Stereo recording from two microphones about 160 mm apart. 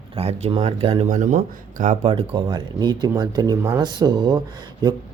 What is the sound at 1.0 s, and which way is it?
Speech, 55° right (ahead or behind).